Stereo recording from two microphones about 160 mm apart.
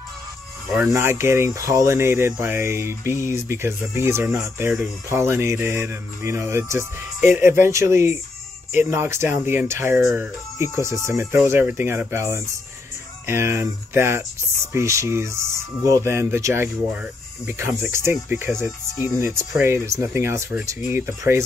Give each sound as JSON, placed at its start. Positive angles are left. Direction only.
{"t": 0.7, "sound": "speech", "side_deg": -15}